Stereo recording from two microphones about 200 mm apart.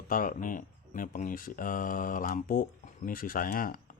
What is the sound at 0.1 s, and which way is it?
A man's voice, 45° left (ahead or behind).